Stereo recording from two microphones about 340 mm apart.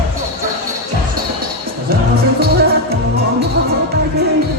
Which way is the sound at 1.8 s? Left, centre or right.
Right.